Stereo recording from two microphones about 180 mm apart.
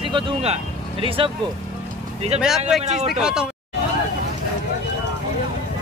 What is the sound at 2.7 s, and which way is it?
Speech, centre (ahead or behind).